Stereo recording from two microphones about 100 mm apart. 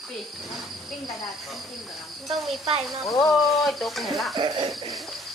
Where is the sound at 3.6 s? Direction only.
Centre (ahead or behind).